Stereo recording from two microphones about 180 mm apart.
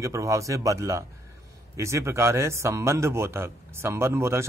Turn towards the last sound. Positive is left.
turn(degrees=-15)  # may be behind; listen again after turning